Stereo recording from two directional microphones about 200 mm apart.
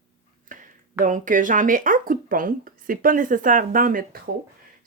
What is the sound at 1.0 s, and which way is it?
Speech, 40° right (ahead or behind).